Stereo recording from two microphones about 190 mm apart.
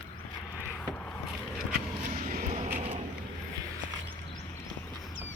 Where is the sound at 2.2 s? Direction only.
45° right (ahead or behind).